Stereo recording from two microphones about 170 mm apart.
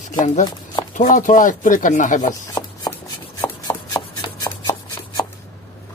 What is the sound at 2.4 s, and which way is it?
Rub, 20° left (ahead or behind).